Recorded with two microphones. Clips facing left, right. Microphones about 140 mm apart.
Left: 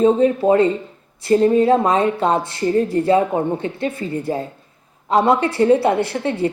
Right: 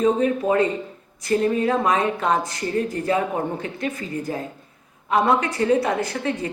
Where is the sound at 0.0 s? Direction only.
30° left (ahead or behind).